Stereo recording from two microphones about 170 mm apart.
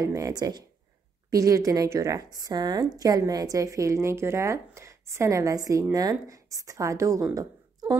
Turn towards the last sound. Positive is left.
turn(degrees=-20)  # may be behind; listen again after turning